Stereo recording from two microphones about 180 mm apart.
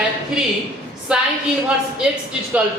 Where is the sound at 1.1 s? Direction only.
5° right (ahead or behind).